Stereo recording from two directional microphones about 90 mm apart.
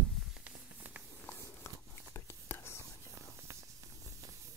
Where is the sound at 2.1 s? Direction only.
30° left (ahead or behind).